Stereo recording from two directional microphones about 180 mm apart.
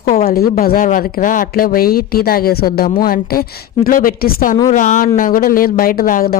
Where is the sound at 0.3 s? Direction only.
55° left (ahead or behind).